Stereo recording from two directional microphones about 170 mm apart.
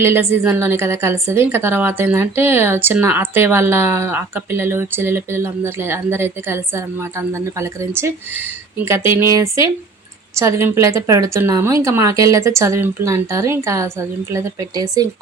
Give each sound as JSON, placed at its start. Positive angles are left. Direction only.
{"t": 0.0, "sound": "a woman's voice", "side_deg": -15}